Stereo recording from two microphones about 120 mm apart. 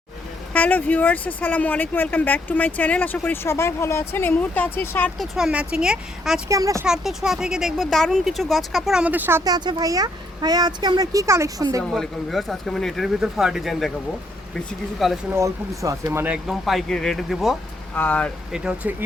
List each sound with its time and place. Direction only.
0.5 s speech: 15° left (ahead or behind)
5.1 s speech: centre (ahead or behind)
6.5 s speech: 25° right (ahead or behind)
6.8 s speech: 5° right (ahead or behind)
9.4 s speech: 35° right (ahead or behind)
11.9 s speech: centre (ahead or behind)
14.9 s speech: centre (ahead or behind)
15.3 s speech: 25° right (ahead or behind)
16.5 s speech: centre (ahead or behind)
17.9 s speech: 15° left (ahead or behind)
18.5 s speech: 10° right (ahead or behind)